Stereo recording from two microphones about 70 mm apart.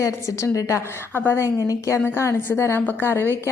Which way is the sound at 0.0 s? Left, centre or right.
Left.